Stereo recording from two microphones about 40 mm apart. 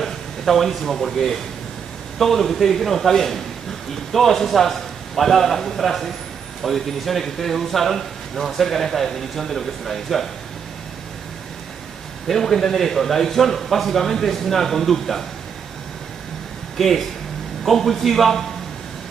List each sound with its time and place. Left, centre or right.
0.0 s speech: centre
12.3 s a man's voice: centre
16.7 s speech: centre